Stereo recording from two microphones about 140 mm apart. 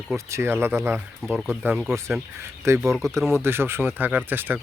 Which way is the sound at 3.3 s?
15° right (ahead or behind).